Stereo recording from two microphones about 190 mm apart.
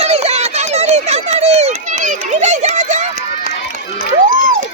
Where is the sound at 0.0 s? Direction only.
35° right (ahead or behind).